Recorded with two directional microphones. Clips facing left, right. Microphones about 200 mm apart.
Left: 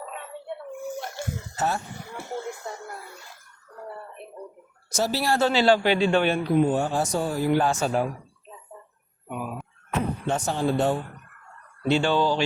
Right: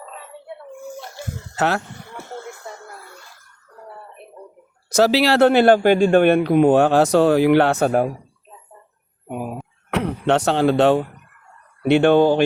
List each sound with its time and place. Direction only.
1.5 s speech: 80° right
4.9 s speech: 85° right; by 8.0 s 55° right (ahead or behind)
9.2 s a sound: 45° right (ahead or behind)
9.9 s speech: 75° right (ahead or behind)
11.9 s speech: 60° right (ahead or behind)